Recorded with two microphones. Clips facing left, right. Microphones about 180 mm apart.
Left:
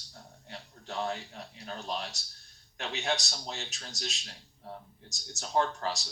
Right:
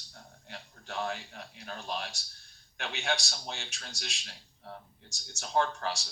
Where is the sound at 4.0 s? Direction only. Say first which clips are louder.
Left 7 dB; 40° left (ahead or behind).